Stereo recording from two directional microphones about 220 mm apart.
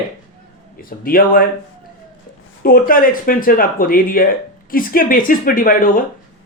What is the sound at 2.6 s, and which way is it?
Speech, 40° left (ahead or behind).